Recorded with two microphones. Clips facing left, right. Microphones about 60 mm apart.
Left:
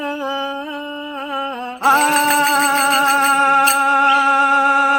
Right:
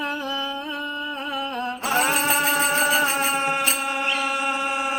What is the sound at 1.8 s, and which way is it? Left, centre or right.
Music, left.